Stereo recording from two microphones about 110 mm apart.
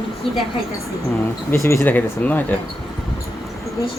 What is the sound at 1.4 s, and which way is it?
Speech, 25° left (ahead or behind).